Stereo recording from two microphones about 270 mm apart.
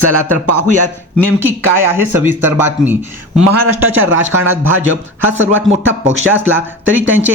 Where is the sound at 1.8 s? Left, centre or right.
Centre.